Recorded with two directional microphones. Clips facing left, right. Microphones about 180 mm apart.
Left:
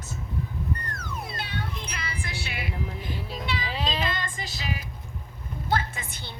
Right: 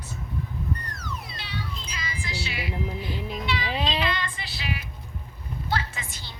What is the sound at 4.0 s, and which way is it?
Female singing, 45° left (ahead or behind).